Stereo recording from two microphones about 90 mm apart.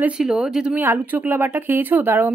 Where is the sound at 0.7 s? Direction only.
20° right (ahead or behind).